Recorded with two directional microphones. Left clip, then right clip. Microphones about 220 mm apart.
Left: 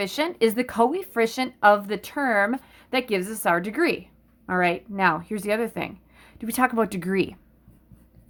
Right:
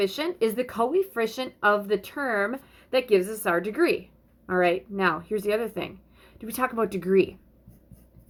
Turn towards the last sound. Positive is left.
turn(degrees=45)  # may be behind; listen again after turning